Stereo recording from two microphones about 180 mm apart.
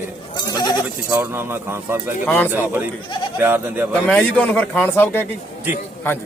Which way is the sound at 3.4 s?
10° right (ahead or behind).